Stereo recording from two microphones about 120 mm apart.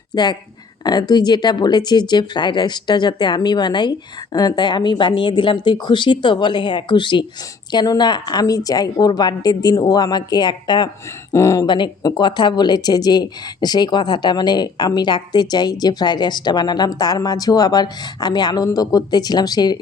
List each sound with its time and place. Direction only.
0.1 s speech: 35° left (ahead or behind)
11.3 s speech: 25° left (ahead or behind)
11.6 s speech: 40° left (ahead or behind)